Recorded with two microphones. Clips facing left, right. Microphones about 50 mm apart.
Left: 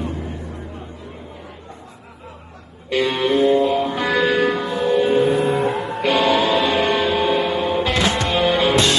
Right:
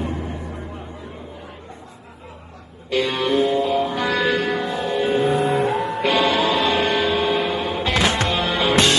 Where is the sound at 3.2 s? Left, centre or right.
Left.